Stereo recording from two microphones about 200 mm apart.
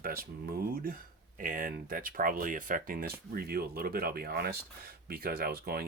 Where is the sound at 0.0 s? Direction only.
45° right (ahead or behind).